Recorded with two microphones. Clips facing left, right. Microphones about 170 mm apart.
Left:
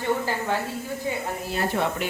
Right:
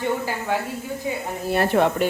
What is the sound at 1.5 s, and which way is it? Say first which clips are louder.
Speech: right 7 dB; 65° right (ahead or behind).